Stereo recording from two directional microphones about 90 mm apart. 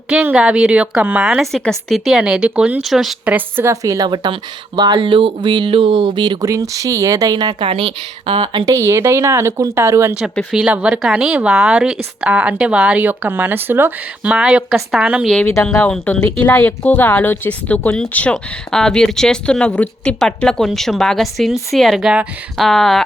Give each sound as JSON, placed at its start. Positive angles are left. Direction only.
{"t": 0.1, "sound": "speech", "side_deg": -15}
{"t": 3.2, "sound": "speech", "side_deg": -20}
{"t": 4.1, "sound": "speech", "side_deg": -60}
{"t": 6.4, "sound": "speech", "side_deg": -35}
{"t": 7.6, "sound": "a woman's voice", "side_deg": -80}
{"t": 8.6, "sound": "speech", "side_deg": -35}
{"t": 10.5, "sound": "speech", "side_deg": -10}
{"t": 14.3, "sound": "speech", "side_deg": -10}
{"t": 15.8, "sound": "speech", "side_deg": 15}